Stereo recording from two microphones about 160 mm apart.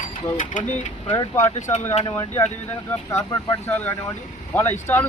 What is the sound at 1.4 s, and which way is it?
Speech, 50° left (ahead or behind).